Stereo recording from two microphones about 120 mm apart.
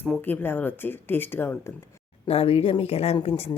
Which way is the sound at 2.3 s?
55° left (ahead or behind).